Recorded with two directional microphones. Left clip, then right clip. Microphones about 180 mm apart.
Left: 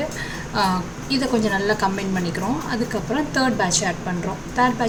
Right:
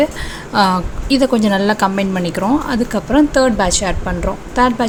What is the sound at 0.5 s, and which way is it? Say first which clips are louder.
A woman's voice: right 8 dB; 45° right (ahead or behind).